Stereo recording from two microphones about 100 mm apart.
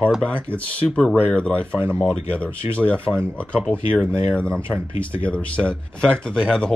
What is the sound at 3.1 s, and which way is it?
Speech, 15° right (ahead or behind).